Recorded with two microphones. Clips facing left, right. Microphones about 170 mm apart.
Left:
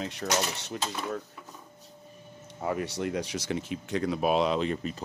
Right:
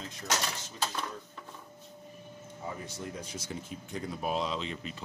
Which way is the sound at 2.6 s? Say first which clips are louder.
Left 10 dB; 75° left (ahead or behind).